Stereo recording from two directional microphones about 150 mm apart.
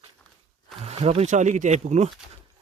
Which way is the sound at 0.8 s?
45° right (ahead or behind).